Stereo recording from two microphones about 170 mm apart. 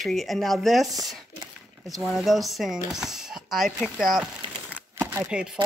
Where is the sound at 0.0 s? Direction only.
Centre (ahead or behind).